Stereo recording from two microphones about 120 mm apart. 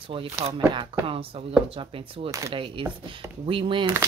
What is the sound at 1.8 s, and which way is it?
Speech, 50° right (ahead or behind).